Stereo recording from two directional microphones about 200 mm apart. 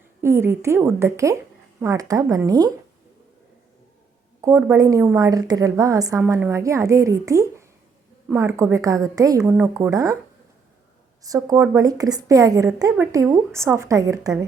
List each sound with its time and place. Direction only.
0.2 s a woman's voice: 15° right (ahead or behind)
4.4 s a woman's voice: 15° right (ahead or behind)
11.2 s a woman's voice: 15° right (ahead or behind)